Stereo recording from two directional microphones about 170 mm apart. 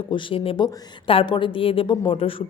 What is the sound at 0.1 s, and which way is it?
A woman's voice, 30° left (ahead or behind).